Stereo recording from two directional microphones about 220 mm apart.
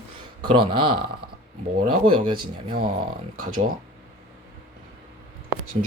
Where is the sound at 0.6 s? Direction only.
20° right (ahead or behind).